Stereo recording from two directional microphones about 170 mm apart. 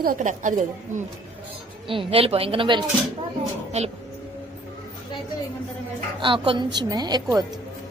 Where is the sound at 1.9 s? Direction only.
35° right (ahead or behind).